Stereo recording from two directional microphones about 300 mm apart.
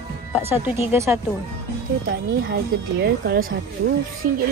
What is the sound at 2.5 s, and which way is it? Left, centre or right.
Speech, right.